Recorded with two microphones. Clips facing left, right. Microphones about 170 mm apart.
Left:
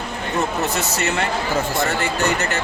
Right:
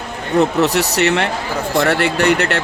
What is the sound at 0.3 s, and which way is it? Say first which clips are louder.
Speech: right 8 dB; 70° right (ahead or behind).